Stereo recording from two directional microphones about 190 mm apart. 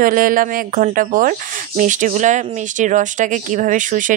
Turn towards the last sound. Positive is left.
turn(degrees=-45)  # may be behind; listen again after turning